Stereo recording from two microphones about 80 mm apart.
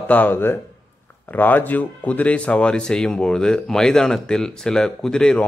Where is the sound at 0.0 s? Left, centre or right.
Left.